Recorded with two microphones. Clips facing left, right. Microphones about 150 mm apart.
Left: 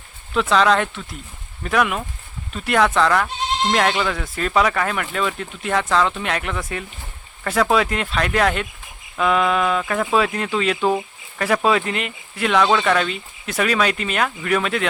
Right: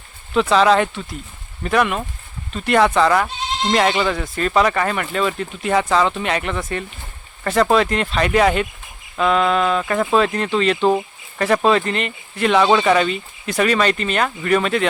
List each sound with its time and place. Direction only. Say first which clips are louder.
0.3 s speech: right 3 dB; centre (ahead or behind)